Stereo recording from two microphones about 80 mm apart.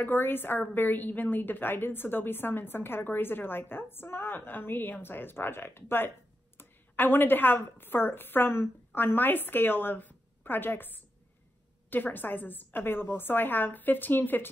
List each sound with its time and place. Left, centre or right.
0.0 s a woman's voice: left